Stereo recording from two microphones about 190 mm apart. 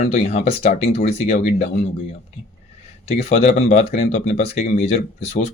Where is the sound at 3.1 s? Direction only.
30° left (ahead or behind).